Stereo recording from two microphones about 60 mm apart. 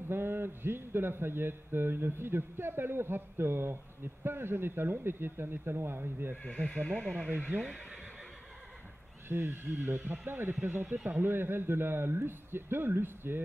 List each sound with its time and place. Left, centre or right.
0.1 s a man's voice: right
6.4 s speech: centre
7.5 s a man's voice: right
9.3 s a man's voice: right